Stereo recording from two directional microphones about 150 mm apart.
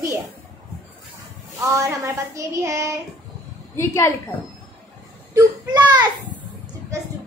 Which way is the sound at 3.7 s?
15° left (ahead or behind).